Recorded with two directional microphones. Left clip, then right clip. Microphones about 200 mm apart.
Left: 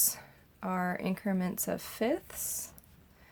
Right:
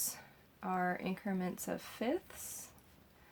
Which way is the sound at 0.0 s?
40° left (ahead or behind).